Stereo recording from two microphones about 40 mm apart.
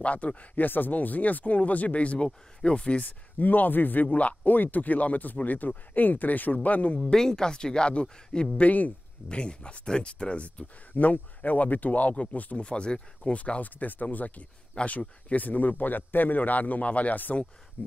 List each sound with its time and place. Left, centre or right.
0.0 s speech: left
0.7 s speech: left
3.0 s speech: left
7.0 s speech: centre
8.5 s speech: left
9.3 s speech: left
12.5 s speech: left
13.4 s speech: left